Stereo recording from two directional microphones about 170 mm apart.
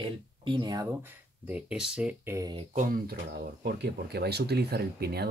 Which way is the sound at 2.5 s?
45° right (ahead or behind).